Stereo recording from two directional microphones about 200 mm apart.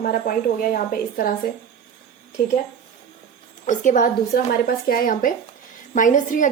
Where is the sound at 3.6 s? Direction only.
40° left (ahead or behind).